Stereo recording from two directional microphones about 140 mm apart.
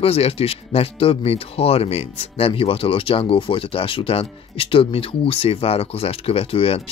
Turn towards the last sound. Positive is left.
turn(degrees=45)  # may be behind; listen again after turning